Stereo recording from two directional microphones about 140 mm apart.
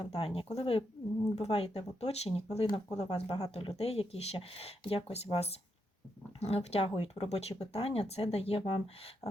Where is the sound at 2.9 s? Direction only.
25° left (ahead or behind).